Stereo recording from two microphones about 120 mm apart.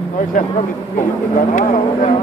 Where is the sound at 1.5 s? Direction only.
90° left.